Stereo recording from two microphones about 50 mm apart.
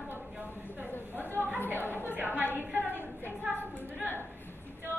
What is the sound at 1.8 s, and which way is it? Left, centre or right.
Speech, left.